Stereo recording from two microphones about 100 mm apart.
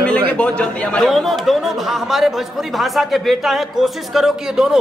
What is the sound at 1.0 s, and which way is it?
A man's voice, centre (ahead or behind).